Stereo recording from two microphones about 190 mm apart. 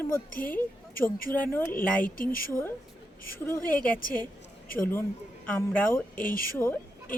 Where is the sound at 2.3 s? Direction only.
50° left (ahead or behind).